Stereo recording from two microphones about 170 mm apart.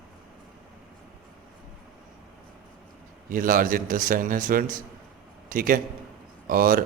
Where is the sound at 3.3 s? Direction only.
55° right (ahead or behind).